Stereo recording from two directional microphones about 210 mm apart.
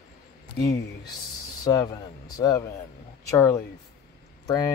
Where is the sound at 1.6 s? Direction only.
20° left (ahead or behind).